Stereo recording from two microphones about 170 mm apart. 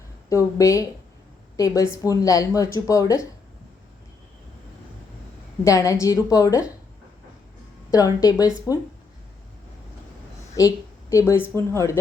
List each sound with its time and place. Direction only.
0.3 s a woman's voice: 15° left (ahead or behind)
5.6 s a woman's voice: 20° left (ahead or behind)
7.9 s a woman's voice: 20° left (ahead or behind)
10.6 s a woman's voice: 20° left (ahead or behind)